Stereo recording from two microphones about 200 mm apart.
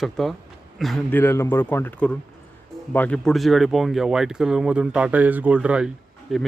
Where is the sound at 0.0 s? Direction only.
Centre (ahead or behind).